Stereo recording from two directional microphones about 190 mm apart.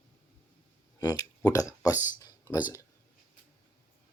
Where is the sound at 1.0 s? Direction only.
20° left (ahead or behind).